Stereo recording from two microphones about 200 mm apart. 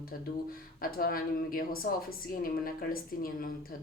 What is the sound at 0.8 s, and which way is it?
A woman's voice, 45° left (ahead or behind).